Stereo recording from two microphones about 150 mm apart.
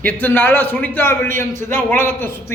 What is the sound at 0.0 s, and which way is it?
A man's voice, 10° left (ahead or behind).